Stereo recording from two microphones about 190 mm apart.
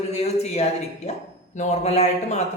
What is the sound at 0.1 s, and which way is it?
Speech, 35° left (ahead or behind).